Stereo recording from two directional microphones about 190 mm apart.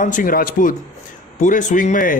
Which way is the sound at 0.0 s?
45° left (ahead or behind).